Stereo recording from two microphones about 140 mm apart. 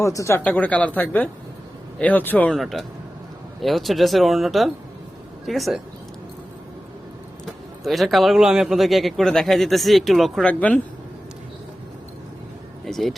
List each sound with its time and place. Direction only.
0.0 s speech: 20° left (ahead or behind)
0.4 s speech: 10° left (ahead or behind)
2.5 s a man's voice: centre (ahead or behind)
7.9 s a man's voice: centre (ahead or behind)
10.5 s speech: 10° left (ahead or behind)
12.8 s speech: centre (ahead or behind)